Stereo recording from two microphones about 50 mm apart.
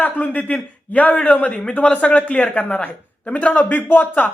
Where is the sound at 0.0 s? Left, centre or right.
Left.